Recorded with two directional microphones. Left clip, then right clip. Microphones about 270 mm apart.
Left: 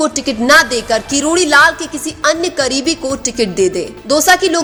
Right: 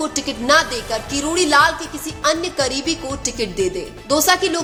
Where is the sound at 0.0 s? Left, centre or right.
Left.